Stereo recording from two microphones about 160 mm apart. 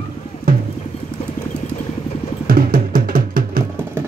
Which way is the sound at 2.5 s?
60° right (ahead or behind).